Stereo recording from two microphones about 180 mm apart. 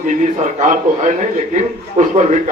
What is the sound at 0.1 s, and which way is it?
A man's voice, 45° right (ahead or behind).